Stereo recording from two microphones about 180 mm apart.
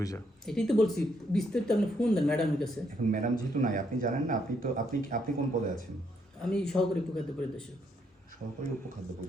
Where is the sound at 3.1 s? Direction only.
45° right (ahead or behind).